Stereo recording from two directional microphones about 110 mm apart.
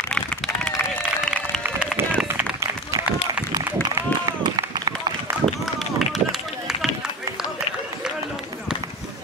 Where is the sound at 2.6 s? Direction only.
30° right (ahead or behind).